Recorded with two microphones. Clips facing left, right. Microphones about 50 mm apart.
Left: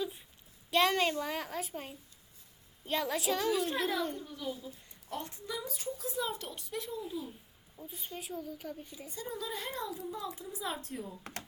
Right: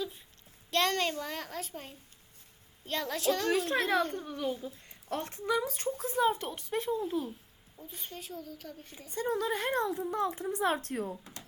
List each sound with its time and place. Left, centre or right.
0.7 s speech: centre
3.5 s a woman's voice: right
7.8 s speech: centre
9.0 s a woman's voice: right